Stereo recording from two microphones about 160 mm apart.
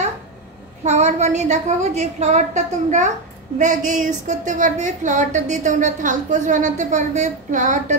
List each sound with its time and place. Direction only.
0.8 s a woman's voice: 45° right (ahead or behind)